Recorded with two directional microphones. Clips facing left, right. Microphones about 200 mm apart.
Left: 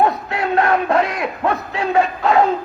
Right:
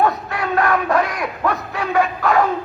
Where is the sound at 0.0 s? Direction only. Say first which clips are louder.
Left 1 dB; 25° left (ahead or behind).